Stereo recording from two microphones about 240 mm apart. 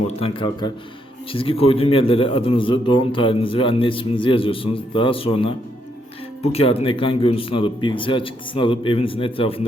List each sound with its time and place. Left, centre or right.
0.2 s a man's voice: left